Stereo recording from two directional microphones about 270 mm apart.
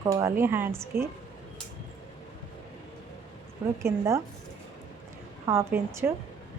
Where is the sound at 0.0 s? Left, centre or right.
Centre.